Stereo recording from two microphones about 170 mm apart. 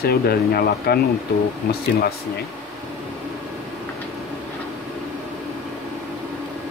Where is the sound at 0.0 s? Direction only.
65° left (ahead or behind).